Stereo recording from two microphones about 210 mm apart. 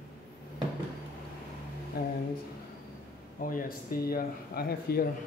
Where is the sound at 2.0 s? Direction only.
50° left (ahead or behind).